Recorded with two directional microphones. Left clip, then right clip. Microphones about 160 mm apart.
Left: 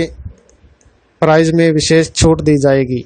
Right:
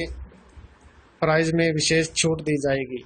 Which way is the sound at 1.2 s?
65° left (ahead or behind).